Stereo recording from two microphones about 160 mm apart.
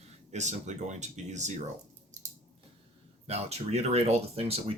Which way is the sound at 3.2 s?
40° right (ahead or behind).